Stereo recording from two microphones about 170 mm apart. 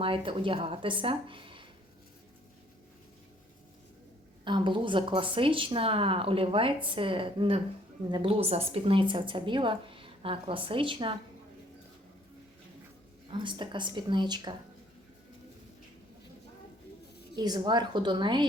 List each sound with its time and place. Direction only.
0.0 s a woman's voice: 30° right (ahead or behind)
4.4 s a woman's voice: 30° right (ahead or behind)
13.3 s speech: 30° right (ahead or behind)
17.3 s speech: 25° right (ahead or behind)